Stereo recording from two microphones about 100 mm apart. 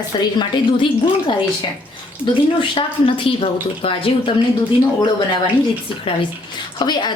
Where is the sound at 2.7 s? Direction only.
60° left (ahead or behind).